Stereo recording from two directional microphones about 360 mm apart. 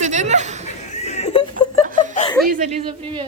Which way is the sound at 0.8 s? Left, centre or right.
Centre.